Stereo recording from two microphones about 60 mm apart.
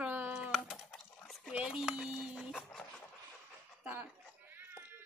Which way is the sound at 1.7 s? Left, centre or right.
Centre.